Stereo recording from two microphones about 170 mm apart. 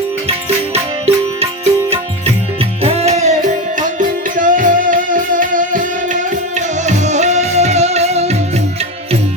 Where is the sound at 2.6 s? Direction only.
35° right (ahead or behind).